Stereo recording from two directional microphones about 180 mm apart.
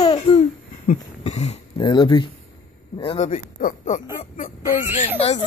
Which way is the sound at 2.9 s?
35° left (ahead or behind).